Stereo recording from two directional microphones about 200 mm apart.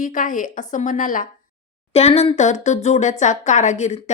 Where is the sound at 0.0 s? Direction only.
40° left (ahead or behind).